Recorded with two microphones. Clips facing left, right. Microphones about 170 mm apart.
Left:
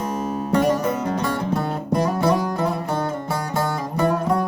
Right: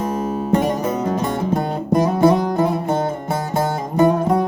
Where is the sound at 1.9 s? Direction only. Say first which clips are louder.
Right 5 dB; 20° right (ahead or behind).